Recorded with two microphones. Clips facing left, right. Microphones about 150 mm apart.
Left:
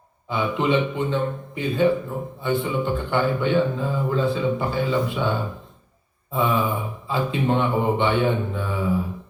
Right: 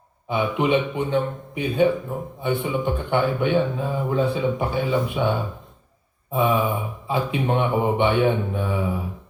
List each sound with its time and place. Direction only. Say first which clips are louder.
0.3 s a man's voice: right 1 dB; 15° right (ahead or behind)
6.3 s a man's voice: right 1 dB; 15° right (ahead or behind)